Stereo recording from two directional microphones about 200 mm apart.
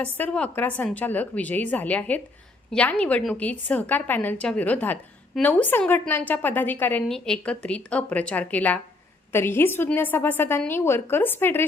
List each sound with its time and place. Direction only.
0.0 s a woman's voice: 5° left (ahead or behind)